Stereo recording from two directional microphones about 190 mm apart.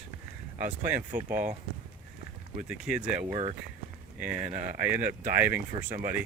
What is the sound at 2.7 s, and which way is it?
Speech, 5° right (ahead or behind).